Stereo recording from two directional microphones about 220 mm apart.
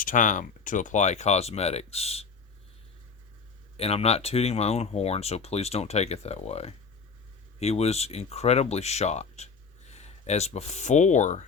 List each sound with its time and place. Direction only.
0.0 s speech: 35° left (ahead or behind)
3.8 s speech: 25° left (ahead or behind)